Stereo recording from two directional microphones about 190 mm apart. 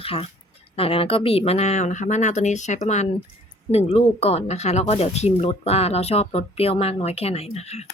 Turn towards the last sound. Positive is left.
turn(degrees=35)  # may be behind; listen again after turning